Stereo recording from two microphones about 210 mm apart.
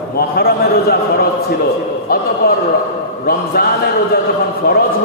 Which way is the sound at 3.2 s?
45° left (ahead or behind).